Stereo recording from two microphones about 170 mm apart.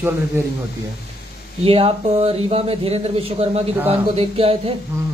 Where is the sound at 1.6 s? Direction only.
35° right (ahead or behind).